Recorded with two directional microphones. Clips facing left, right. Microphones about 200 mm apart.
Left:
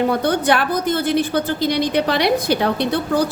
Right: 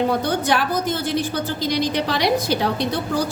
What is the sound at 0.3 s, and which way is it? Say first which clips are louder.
A woman's voice: left 3 dB; 60° left (ahead or behind).